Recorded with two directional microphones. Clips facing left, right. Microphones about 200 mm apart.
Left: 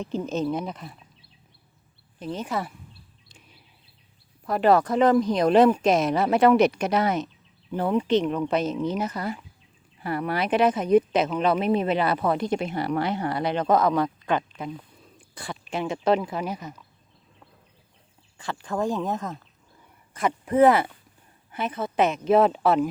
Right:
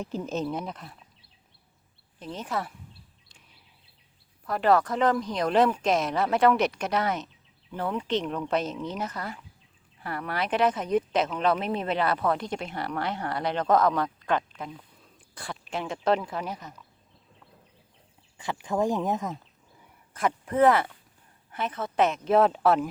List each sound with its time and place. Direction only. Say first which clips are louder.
0.0 s speech: left 4 dB; 5° right (ahead or behind)
2.1 s speech: left 3 dB; 5° left (ahead or behind)
4.4 s speech: left 3 dB; 15° left (ahead or behind)
8.0 s speech: left 6 dB; 5° left (ahead or behind)
18.3 s speech: right 1 dB; 15° right (ahead or behind)
20.4 s speech: left 4 dB; 10° left (ahead or behind)